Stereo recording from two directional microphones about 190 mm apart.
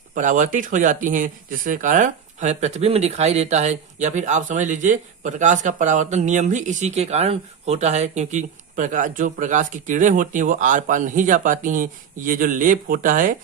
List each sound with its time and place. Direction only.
0.1 s speech: 40° right (ahead or behind)